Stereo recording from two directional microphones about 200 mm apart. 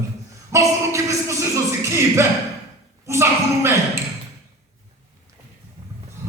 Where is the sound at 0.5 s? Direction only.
15° right (ahead or behind).